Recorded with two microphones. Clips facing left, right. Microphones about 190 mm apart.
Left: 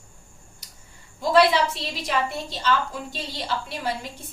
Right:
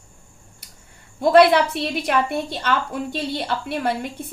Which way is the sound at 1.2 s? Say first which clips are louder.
Right 5 dB; 60° right (ahead or behind).